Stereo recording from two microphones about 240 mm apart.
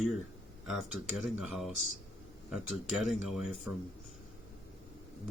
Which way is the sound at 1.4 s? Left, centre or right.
Centre.